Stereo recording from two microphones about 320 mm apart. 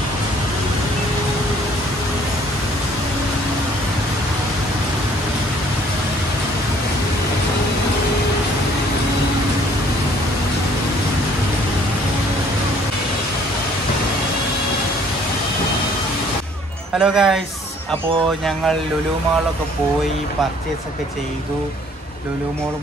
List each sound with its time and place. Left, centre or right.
17.0 s a man's voice: centre